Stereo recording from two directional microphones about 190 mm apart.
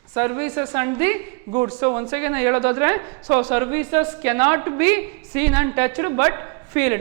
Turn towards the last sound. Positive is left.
turn(degrees=-15)  # may be behind; listen again after turning